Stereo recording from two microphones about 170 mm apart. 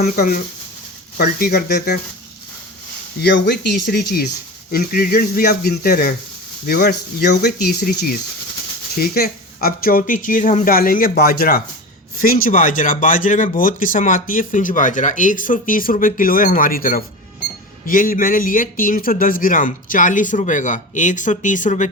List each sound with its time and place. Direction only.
0.0 s speech: 60° left (ahead or behind)
3.2 s speech: 80° left
4.7 s speech: 60° left (ahead or behind)